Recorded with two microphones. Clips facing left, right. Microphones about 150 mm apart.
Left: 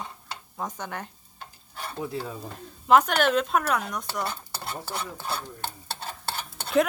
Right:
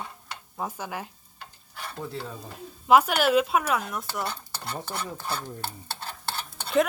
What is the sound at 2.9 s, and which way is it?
Speech, 5° right (ahead or behind).